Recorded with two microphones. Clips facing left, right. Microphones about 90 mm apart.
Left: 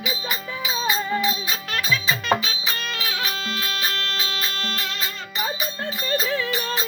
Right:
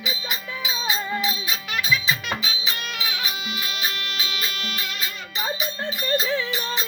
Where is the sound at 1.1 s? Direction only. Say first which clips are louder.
Left 3 dB; 5° right (ahead or behind).